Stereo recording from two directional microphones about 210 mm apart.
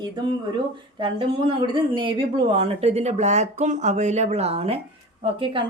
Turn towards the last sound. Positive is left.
turn(degrees=-25)  # may be behind; listen again after turning